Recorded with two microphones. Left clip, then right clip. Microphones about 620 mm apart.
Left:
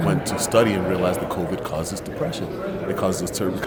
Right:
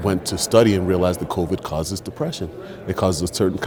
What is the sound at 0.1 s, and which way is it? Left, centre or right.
Speech, right.